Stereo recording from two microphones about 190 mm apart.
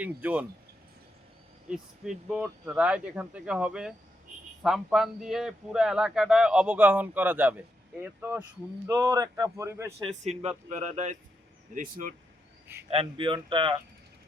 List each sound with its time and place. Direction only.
0.0 s speech: 10° right (ahead or behind)
1.7 s speech: 5° right (ahead or behind)
10.0 s a man's voice: 35° right (ahead or behind)
12.9 s speech: 30° right (ahead or behind)